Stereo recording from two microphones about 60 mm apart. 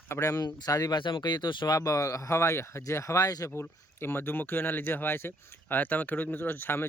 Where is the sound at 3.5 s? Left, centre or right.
Left.